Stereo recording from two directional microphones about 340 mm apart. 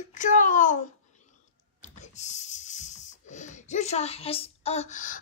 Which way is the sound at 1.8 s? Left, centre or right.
Left.